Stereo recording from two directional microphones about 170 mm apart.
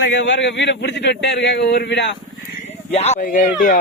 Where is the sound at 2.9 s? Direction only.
40° left (ahead or behind).